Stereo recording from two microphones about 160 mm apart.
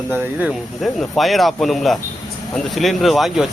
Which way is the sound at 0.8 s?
Centre (ahead or behind).